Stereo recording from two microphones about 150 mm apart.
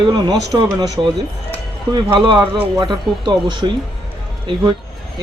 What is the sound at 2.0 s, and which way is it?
Speech, 35° right (ahead or behind).